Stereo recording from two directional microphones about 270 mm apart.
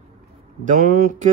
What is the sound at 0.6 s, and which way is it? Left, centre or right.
Speech, right.